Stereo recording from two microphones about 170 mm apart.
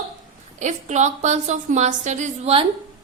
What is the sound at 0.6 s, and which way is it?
Speech, 45° right (ahead or behind).